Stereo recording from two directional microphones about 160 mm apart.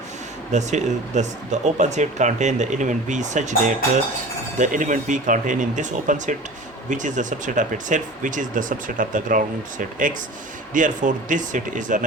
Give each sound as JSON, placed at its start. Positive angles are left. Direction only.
{"t": 0.5, "sound": "speech", "side_deg": -50}